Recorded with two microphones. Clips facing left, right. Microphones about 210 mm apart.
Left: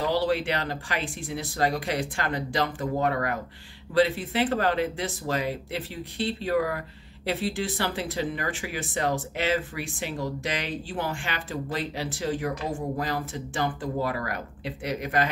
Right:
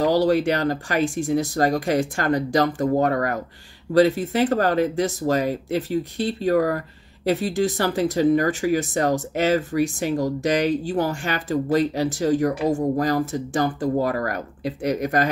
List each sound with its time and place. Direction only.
0.0 s speech: 40° right (ahead or behind)